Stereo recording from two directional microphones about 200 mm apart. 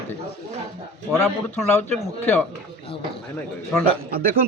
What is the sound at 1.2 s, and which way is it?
Speech, 10° left (ahead or behind).